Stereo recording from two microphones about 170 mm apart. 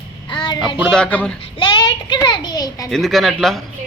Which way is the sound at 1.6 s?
30° left (ahead or behind).